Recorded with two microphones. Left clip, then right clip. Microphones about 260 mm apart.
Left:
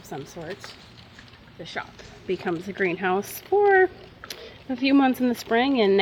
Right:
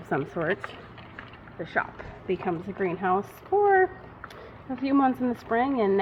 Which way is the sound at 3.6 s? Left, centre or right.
Left.